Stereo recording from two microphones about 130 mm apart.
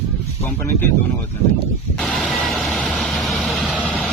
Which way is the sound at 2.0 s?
Centre (ahead or behind).